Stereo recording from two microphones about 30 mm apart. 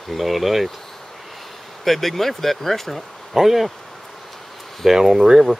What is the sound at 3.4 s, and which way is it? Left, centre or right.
Speech, centre.